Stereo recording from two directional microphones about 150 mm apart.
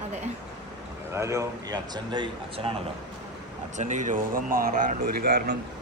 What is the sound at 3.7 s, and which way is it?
Speech, 55° right (ahead or behind).